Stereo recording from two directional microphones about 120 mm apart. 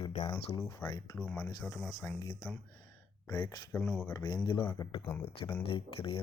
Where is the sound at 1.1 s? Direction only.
10° left (ahead or behind).